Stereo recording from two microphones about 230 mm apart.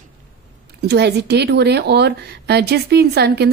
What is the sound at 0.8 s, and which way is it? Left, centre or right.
A woman's voice, right.